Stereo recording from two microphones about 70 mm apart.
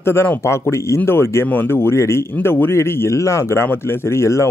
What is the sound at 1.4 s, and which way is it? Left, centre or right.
Speech, left.